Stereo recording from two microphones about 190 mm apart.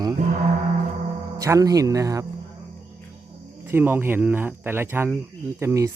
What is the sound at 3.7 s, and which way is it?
Speech, 10° right (ahead or behind).